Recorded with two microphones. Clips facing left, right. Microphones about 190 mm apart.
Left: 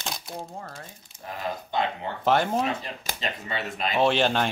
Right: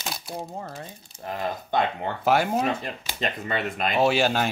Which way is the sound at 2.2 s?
10° right (ahead or behind).